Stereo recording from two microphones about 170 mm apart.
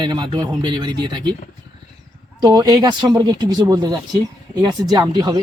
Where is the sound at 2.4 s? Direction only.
25° right (ahead or behind).